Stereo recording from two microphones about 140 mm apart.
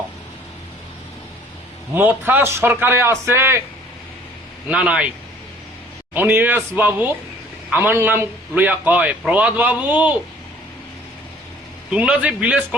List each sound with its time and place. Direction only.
2.0 s a man's voice: 15° right (ahead or behind)
4.7 s a man's voice: 10° right (ahead or behind)
6.1 s a man's voice: 10° right (ahead or behind)
11.9 s a man's voice: 10° right (ahead or behind)